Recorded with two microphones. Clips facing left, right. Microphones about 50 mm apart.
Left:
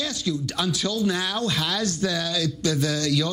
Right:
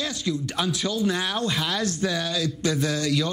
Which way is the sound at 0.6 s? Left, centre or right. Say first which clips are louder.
Even; centre.